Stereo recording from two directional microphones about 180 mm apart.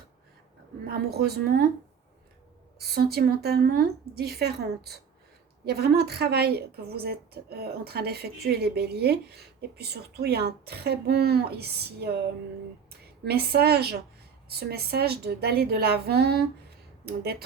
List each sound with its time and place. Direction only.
0.9 s a woman's voice: 60° right (ahead or behind)
2.7 s a woman's voice: 60° right (ahead or behind)